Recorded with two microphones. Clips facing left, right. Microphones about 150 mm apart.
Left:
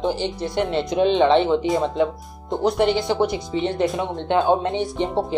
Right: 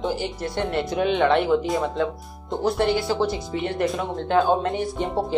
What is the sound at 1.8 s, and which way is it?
Speech, 20° left (ahead or behind).